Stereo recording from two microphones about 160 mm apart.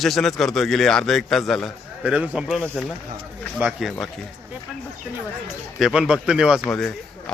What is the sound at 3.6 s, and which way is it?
Speech, centre (ahead or behind).